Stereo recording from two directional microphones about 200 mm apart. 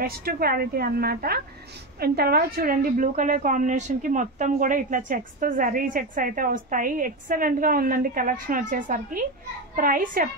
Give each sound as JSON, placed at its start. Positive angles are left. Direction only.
{"t": 0.0, "sound": "a woman's voice", "side_deg": -50}